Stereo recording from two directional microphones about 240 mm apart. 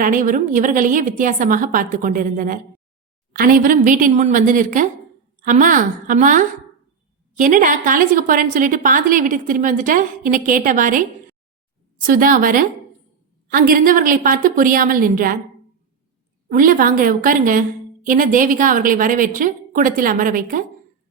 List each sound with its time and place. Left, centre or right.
0.0 s a woman's voice: right
12.0 s a woman's voice: right
16.5 s a woman's voice: right